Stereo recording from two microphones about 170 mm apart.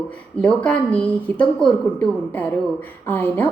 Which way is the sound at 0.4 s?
10° left (ahead or behind).